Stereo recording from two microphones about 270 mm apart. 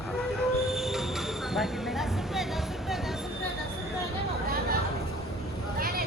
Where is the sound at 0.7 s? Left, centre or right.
Centre.